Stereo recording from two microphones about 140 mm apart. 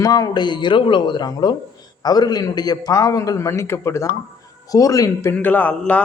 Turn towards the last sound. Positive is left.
turn(degrees=10)  # may be behind; listen again after turning